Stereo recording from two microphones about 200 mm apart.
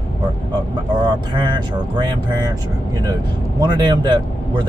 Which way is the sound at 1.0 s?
20° right (ahead or behind).